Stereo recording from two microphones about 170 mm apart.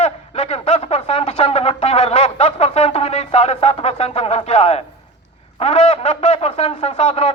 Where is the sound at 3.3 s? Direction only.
40° left (ahead or behind).